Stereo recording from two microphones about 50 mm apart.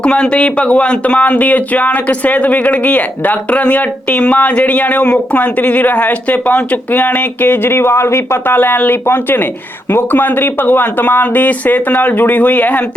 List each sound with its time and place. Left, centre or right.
0.0 s speech: centre; by 8.5 s left
8.5 s speech: left